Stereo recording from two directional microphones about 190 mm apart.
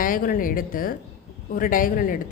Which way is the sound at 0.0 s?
45° left (ahead or behind).